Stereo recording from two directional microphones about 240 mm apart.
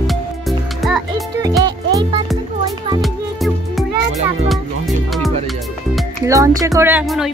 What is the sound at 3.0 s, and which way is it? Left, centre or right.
Music, centre.